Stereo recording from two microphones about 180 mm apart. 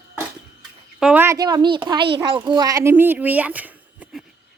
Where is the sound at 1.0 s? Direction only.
10° right (ahead or behind).